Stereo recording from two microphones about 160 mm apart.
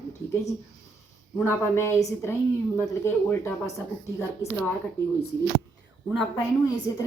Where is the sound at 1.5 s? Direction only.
15° left (ahead or behind).